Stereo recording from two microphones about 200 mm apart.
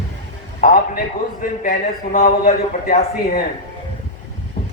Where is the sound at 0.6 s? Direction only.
45° left (ahead or behind).